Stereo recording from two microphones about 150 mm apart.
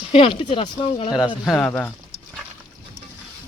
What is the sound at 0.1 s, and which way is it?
Speech, 35° left (ahead or behind).